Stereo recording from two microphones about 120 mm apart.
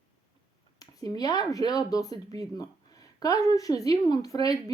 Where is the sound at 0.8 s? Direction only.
30° left (ahead or behind).